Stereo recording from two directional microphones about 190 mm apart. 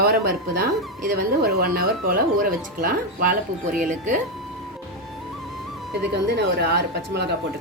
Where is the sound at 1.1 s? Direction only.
50° right (ahead or behind).